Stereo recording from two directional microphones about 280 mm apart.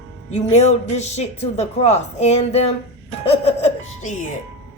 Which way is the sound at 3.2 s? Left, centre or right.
Left.